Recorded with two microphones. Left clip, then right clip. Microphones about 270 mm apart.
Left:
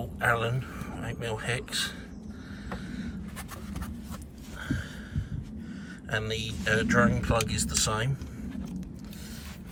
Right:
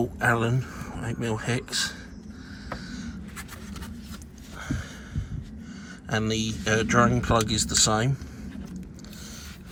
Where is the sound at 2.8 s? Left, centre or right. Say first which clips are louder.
Right 1 dB; right.